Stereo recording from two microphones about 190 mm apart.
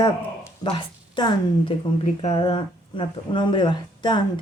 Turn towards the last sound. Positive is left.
turn(degrees=25)  # may be behind; listen again after turning